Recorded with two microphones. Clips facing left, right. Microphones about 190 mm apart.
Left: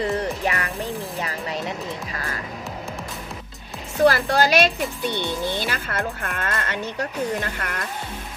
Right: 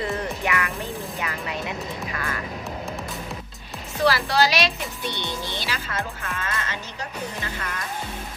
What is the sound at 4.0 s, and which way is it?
A woman's voice, 50° left (ahead or behind).